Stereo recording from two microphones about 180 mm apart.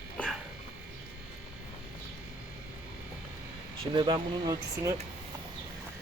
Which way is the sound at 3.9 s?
25° right (ahead or behind).